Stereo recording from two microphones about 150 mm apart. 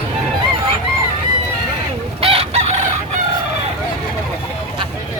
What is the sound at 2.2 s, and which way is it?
Chicken, 40° right (ahead or behind).